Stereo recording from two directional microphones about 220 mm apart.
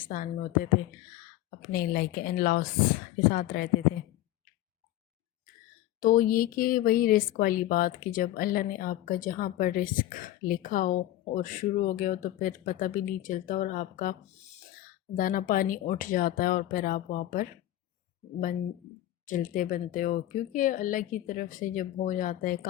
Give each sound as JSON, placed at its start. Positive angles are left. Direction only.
{"t": 0.0, "sound": "speech", "side_deg": 40}
{"t": 6.0, "sound": "speech", "side_deg": 35}
{"t": 19.2, "sound": "speech", "side_deg": 35}